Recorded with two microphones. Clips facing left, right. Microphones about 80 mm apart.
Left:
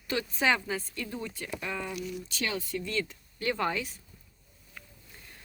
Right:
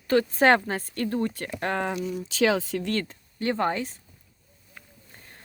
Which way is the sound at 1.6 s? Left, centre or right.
Right.